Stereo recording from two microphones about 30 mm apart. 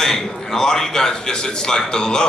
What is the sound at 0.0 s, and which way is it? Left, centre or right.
A man's voice, centre.